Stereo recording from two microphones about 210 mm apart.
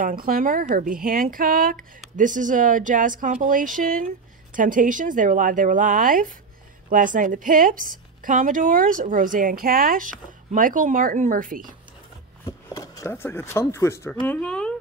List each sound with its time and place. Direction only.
0.0 s a woman's voice: 45° right (ahead or behind)
12.4 s speech: 15° left (ahead or behind)